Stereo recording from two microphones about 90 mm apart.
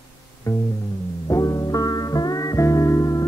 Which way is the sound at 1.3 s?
40° left (ahead or behind).